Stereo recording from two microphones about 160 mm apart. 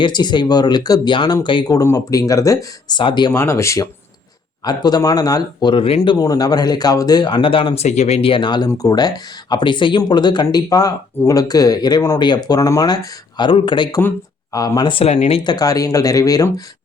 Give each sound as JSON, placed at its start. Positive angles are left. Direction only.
{"t": 0.0, "sound": "speech", "side_deg": 25}
{"t": 3.3, "sound": "speech", "side_deg": 15}
{"t": 6.0, "sound": "speech", "side_deg": 25}